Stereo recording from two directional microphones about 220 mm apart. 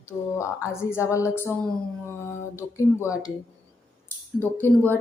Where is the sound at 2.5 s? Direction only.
15° left (ahead or behind).